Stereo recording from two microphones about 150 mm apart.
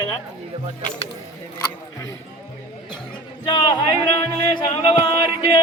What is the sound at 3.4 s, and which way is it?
Speech, 30° left (ahead or behind).